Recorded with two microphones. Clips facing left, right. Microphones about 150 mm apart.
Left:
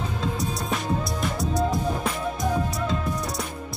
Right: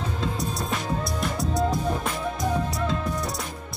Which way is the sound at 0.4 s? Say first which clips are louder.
Left 1 dB; centre (ahead or behind).